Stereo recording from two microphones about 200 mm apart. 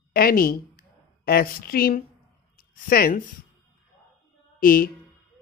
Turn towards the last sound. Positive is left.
turn(degrees=45)  # may be behind; listen again after turning